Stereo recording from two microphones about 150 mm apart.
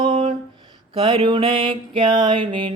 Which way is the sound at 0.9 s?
35° right (ahead or behind).